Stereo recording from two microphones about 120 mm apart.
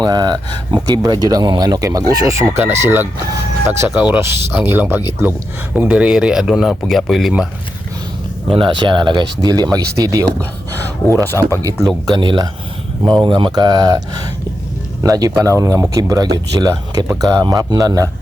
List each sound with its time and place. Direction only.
0.0 s speech: 35° right (ahead or behind); by 4.2 s 10° right (ahead or behind)
4.2 s speech: 20° right (ahead or behind); by 7.4 s centre (ahead or behind)
8.5 s speech: 40° right (ahead or behind)
11.3 s speech: 20° left (ahead or behind)
11.5 s speech: 30° right (ahead or behind)
12.0 s speech: 40° right (ahead or behind)
15.0 s speech: 30° right (ahead or behind)